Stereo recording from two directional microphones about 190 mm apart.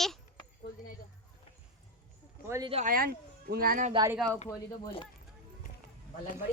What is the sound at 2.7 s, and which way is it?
Speech, 45° right (ahead or behind).